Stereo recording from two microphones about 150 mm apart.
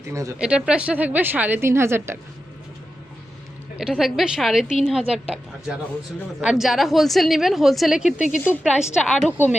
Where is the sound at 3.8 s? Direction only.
Centre (ahead or behind).